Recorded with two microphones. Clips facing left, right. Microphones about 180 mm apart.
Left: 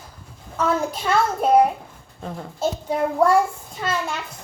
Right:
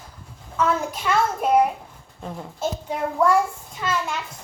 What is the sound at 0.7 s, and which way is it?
A child's voice, 30° left (ahead or behind).